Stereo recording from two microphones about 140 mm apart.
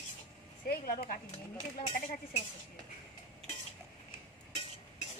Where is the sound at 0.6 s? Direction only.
90° left; by 2.1 s 70° left (ahead or behind).